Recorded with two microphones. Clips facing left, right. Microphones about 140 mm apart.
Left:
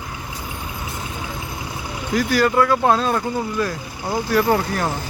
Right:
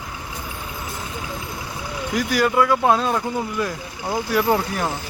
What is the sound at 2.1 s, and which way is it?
Speech, 15° right (ahead or behind).